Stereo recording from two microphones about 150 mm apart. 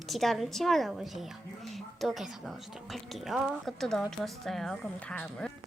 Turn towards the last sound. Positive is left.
turn(degrees=5)  # may be behind; listen again after turning